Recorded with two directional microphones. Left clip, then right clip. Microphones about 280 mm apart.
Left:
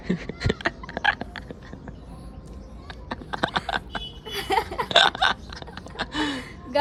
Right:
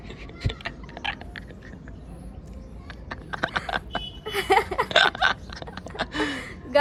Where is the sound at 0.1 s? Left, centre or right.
Left.